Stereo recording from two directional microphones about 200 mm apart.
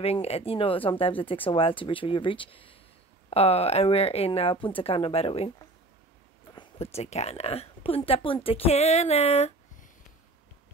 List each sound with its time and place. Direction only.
0.0 s speech: 30° left (ahead or behind)
6.5 s a woman's voice: 25° left (ahead or behind)